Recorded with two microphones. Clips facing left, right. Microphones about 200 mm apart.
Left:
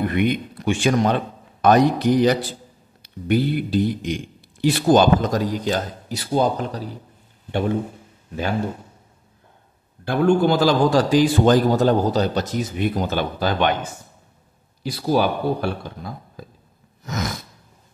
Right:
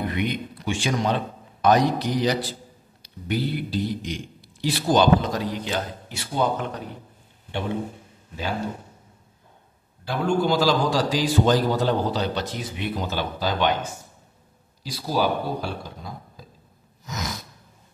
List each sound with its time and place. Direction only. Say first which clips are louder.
0.0 s a man's voice: left 6 dB; 55° left (ahead or behind); by 7.0 s 35° left (ahead or behind)
10.0 s a man's voice: left 6 dB; 55° left (ahead or behind)
14.8 s speech: left 5 dB; 55° left (ahead or behind)
17.0 s gasp: left 6 dB; 55° left (ahead or behind)